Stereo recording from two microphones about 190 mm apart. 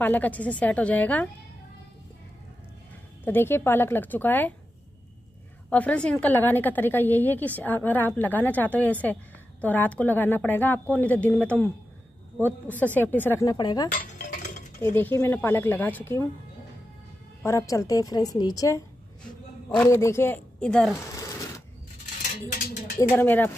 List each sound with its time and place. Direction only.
0.0 s a woman's voice: 10° left (ahead or behind)
3.3 s a woman's voice: 10° left (ahead or behind)
5.7 s a woman's voice: 10° left (ahead or behind)
13.9 s cutlery: 45° left (ahead or behind)
15.0 s a woman's voice: 10° left (ahead or behind)
17.5 s a woman's voice: 15° left (ahead or behind)
19.8 s a woman's voice: 15° left (ahead or behind)
21.1 s a sound: 15° left (ahead or behind)
23.1 s a woman's voice: 10° left (ahead or behind)